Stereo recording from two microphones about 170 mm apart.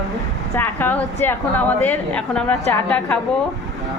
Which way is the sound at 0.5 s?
10° left (ahead or behind).